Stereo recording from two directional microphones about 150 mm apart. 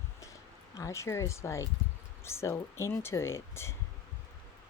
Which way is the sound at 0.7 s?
20° left (ahead or behind).